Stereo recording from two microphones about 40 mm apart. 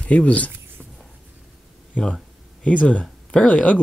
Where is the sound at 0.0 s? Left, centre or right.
Left.